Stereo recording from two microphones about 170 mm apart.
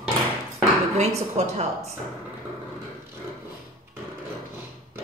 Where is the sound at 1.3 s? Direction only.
40° right (ahead or behind).